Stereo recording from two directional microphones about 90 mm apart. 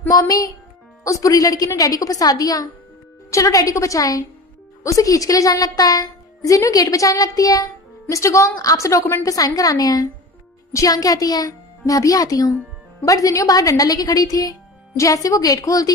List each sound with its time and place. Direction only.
0.1 s a woman's voice: 40° left (ahead or behind)